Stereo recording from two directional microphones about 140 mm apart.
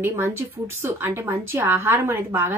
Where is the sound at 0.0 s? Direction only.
15° right (ahead or behind).